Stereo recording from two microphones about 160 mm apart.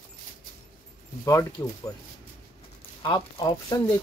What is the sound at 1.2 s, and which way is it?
Speech, 20° left (ahead or behind).